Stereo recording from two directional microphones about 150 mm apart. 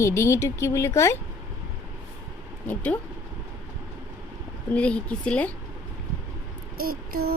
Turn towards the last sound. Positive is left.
turn(degrees=-80)